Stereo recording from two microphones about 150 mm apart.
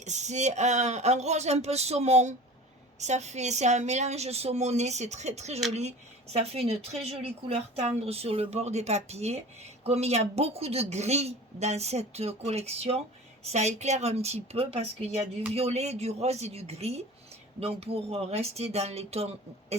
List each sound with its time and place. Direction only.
0.0 s a woman's voice: 50° right (ahead or behind)